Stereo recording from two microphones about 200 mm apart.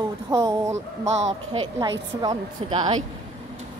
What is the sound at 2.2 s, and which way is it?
Speech, 20° right (ahead or behind).